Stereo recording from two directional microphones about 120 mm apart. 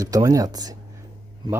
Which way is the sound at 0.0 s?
30° right (ahead or behind).